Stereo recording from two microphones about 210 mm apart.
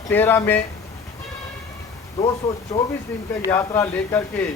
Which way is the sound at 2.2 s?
15° left (ahead or behind).